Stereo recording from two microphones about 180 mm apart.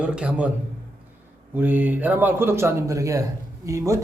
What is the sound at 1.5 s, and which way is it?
A man's voice, 10° right (ahead or behind).